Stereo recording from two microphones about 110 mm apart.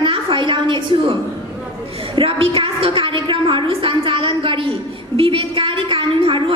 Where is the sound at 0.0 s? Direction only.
50° right (ahead or behind).